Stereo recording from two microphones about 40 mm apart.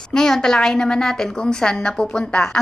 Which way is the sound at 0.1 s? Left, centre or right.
Centre.